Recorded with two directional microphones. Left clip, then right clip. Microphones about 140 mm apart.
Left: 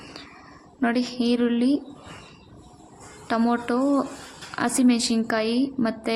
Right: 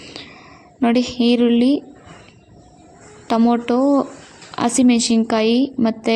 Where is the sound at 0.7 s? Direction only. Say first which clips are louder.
Right 7 dB; 25° right (ahead or behind).